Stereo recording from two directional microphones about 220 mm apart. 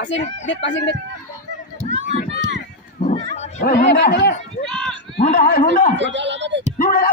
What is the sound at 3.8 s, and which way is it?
Speech, 55° left (ahead or behind).